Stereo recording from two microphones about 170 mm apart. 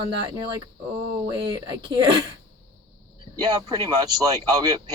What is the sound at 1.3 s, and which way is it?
Speech, 25° right (ahead or behind).